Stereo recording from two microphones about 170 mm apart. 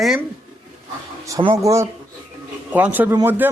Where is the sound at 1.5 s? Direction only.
20° right (ahead or behind).